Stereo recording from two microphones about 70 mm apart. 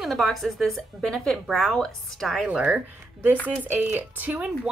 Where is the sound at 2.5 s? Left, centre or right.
Centre.